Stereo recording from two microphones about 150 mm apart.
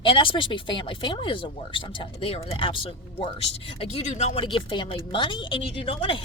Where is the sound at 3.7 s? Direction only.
45° left (ahead or behind).